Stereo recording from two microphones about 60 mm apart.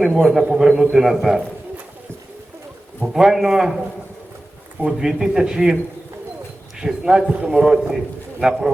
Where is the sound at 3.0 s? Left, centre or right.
Centre.